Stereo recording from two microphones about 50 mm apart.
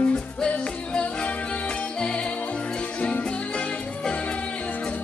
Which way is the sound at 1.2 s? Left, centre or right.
Left.